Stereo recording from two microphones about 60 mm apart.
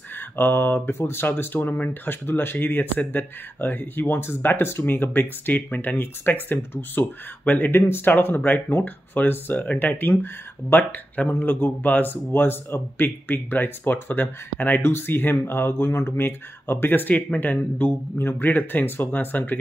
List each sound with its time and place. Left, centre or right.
0.1 s mantra: left
0.8 s speech: left
10.8 s speech: left